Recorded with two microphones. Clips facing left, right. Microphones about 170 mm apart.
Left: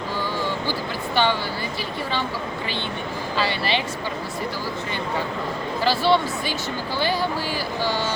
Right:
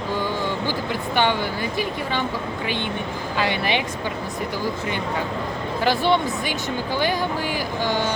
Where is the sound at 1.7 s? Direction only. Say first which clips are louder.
Right 2 dB; 15° right (ahead or behind).